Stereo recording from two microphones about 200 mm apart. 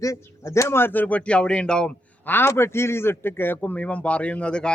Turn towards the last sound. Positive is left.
turn(degrees=5)  # may be behind; listen again after turning